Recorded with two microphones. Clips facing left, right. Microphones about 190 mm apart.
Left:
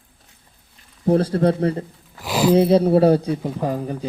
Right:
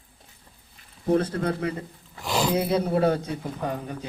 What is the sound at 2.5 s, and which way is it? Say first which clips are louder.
Speech: left 11 dB; 30° left (ahead or behind).